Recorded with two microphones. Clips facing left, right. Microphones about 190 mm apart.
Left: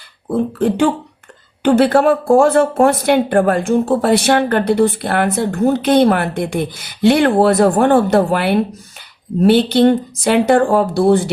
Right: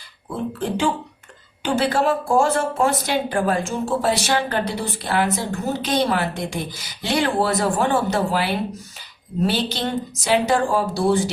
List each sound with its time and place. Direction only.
0.3 s speech: 55° left (ahead or behind)